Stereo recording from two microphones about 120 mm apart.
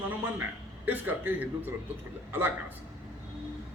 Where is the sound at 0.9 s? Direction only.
15° right (ahead or behind).